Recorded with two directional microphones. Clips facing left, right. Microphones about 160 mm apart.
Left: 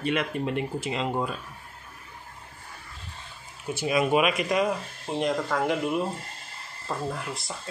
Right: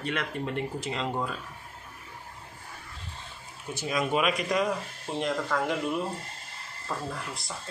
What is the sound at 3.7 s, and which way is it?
Speech, 10° left (ahead or behind).